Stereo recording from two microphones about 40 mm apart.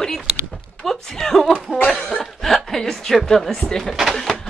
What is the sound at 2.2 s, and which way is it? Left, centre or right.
Cough, centre.